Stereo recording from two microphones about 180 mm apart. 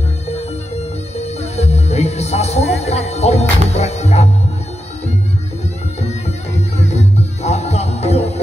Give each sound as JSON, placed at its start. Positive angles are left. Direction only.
{"t": 1.1, "sound": "speech", "side_deg": 35}
{"t": 6.0, "sound": "music", "side_deg": 35}